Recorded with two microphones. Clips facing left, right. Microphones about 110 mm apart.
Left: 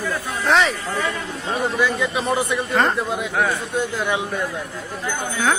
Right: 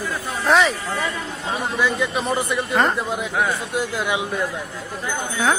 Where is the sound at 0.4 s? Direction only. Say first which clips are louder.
Right 1 dB; centre (ahead or behind).